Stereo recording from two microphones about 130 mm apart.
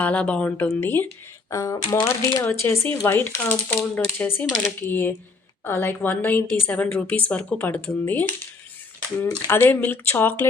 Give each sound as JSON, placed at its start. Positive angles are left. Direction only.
{"t": 0.0, "sound": "a woman's voice", "side_deg": 10}